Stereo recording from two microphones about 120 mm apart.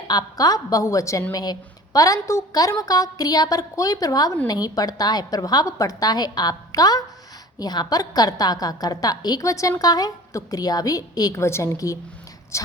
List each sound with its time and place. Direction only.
0.1 s a woman's voice: 30° left (ahead or behind)